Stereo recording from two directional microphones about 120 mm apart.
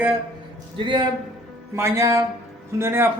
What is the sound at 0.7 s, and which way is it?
Speech, 45° right (ahead or behind).